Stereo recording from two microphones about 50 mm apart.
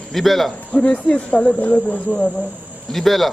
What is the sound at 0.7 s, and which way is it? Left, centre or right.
Speech, left.